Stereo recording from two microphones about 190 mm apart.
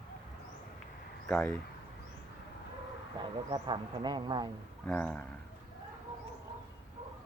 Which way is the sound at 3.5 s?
20° right (ahead or behind).